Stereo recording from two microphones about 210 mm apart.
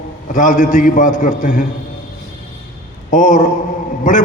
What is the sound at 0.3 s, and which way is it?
A man's voice, 35° left (ahead or behind).